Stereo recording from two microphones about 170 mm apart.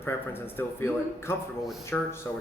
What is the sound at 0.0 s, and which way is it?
A man's voice, 15° left (ahead or behind).